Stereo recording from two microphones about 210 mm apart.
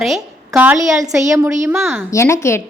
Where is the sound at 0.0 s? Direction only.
Centre (ahead or behind).